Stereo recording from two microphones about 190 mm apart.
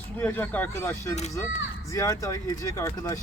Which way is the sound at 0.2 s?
10° left (ahead or behind).